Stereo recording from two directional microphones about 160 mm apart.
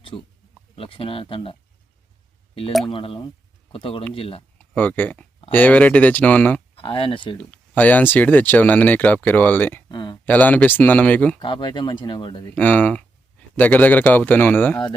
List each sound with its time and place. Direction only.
0.0 s a sound: 30° left (ahead or behind)
0.8 s speech: 35° left (ahead or behind)
2.9 s speech: 35° left (ahead or behind)
4.5 s speech: 10° left (ahead or behind)
6.7 s speech: 35° left (ahead or behind)
7.3 s speech: 10° left (ahead or behind)
9.9 s speech: 25° left (ahead or behind)
10.2 s speech: 10° left (ahead or behind)
11.3 s speech: 30° left (ahead or behind)
12.5 s speech: 10° left (ahead or behind)